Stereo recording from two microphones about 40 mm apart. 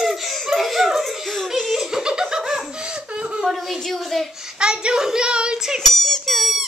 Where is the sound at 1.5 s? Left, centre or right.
Centre.